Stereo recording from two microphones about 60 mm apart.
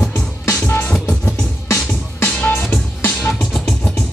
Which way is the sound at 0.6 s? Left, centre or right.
Left.